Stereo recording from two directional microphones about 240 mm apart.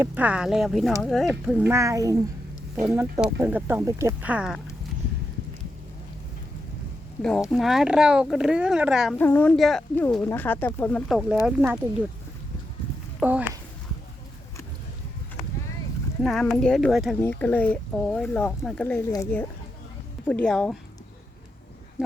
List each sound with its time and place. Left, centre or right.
0.0 s speech: centre
7.2 s speech: centre
13.1 s speech: centre
16.2 s speech: centre